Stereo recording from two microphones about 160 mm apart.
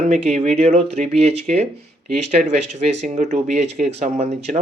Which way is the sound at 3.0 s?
45° right (ahead or behind).